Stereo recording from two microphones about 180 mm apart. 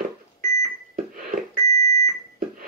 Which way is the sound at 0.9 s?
50° right (ahead or behind).